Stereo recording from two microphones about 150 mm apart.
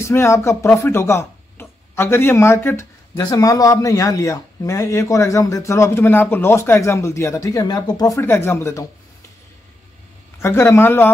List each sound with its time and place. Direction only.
0.0 s speech: 20° left (ahead or behind)
10.4 s speech: 15° left (ahead or behind)